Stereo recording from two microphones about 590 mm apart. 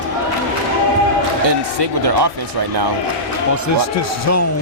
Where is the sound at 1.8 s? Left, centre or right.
Right.